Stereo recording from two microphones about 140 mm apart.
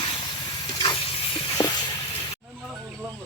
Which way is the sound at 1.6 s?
30° left (ahead or behind).